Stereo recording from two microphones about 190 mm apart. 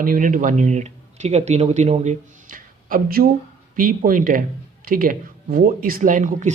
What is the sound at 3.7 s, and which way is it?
Speech, 45° right (ahead or behind).